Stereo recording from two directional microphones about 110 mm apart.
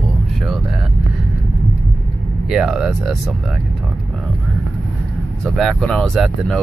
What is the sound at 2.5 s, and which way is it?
Speech, 5° right (ahead or behind).